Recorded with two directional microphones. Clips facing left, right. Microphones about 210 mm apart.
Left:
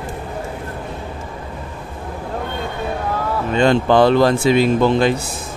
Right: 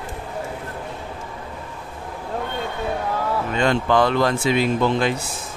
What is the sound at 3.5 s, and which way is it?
Speech, 30° left (ahead or behind).